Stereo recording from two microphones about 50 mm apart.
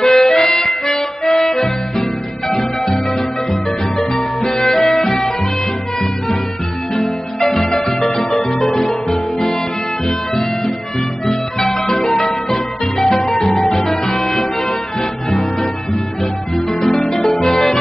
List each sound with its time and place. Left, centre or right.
0.0 s harmonica: centre
0.9 s music: centre
4.0 s music: centre
7.0 s harp: centre
8.2 s music: left
8.5 s music: centre
11.7 s music: left
13.0 s music: centre
17.0 s music: centre